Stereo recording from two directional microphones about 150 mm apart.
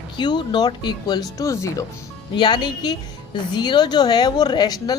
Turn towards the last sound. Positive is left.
turn(degrees=25)  # may be behind; listen again after turning